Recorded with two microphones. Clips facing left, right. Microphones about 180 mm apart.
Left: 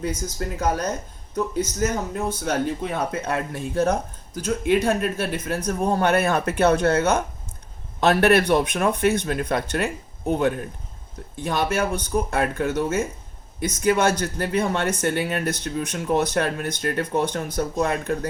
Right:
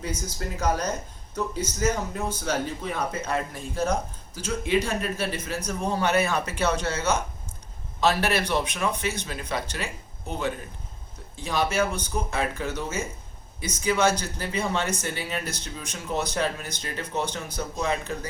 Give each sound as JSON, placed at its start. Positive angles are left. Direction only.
{"t": 0.0, "sound": "speech", "side_deg": 55}